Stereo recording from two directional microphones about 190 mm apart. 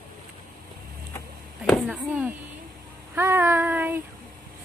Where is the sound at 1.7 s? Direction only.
5° right (ahead or behind).